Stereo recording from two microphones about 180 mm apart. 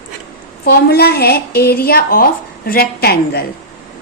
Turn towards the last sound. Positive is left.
turn(degrees=60)  # may be behind; listen again after turning